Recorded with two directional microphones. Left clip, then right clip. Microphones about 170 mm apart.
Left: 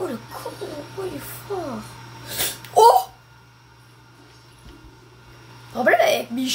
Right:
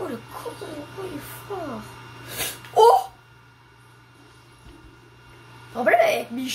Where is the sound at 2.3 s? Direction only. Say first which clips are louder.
Left 3 dB; 25° left (ahead or behind).